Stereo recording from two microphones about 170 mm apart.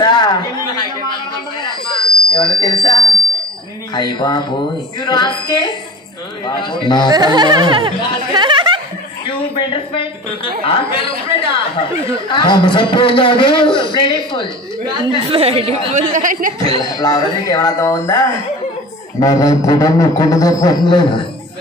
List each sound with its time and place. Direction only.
0.0 s a sound: 25° left (ahead or behind)
2.0 s a sound: 30° left (ahead or behind)
3.9 s a man's voice: 25° left (ahead or behind)
7.1 s a sound: 25° right (ahead or behind)
8.4 s music: 25° right (ahead or behind)
9.3 s a man's voice: 30° left (ahead or behind)
14.9 s speech: 25° right (ahead or behind); by 16.5 s 50° right (ahead or behind)
16.6 s speech: 35° right (ahead or behind)
17.0 s a man's voice: 20° left (ahead or behind)